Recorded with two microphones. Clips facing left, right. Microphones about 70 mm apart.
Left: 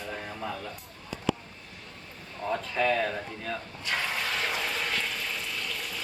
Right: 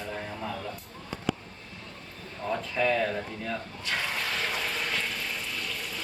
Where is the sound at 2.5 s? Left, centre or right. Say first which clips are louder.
Even; centre.